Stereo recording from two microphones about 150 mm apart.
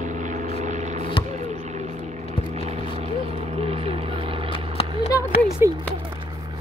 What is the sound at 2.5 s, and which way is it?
Vehicle, 45° right (ahead or behind).